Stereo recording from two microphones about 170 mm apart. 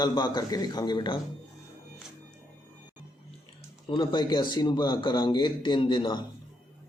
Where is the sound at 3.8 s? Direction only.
30° left (ahead or behind).